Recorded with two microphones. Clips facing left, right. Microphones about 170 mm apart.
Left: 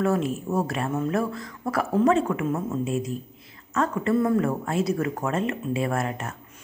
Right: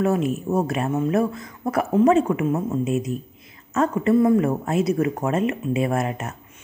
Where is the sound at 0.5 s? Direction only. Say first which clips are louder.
Right 4 dB; 20° right (ahead or behind).